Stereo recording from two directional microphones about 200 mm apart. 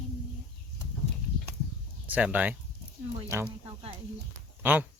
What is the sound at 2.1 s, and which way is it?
Speech, 5° right (ahead or behind).